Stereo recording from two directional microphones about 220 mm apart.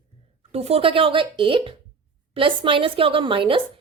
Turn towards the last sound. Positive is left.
turn(degrees=-25)  # may be behind; listen again after turning